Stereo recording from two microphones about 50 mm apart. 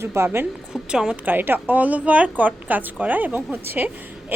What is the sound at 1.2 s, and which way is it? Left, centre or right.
A woman's voice, right.